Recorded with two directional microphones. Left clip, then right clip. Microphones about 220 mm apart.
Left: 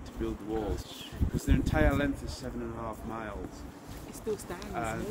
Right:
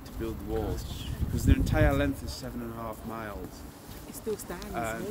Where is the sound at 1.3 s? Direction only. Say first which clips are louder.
Right 2 dB; 55° right (ahead or behind).